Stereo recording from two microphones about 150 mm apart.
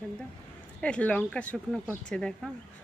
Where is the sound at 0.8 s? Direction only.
10° left (ahead or behind).